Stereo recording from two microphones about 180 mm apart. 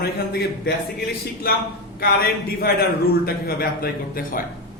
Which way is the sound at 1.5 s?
55° left (ahead or behind).